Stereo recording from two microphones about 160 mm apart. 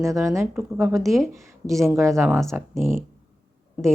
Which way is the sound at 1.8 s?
15° right (ahead or behind).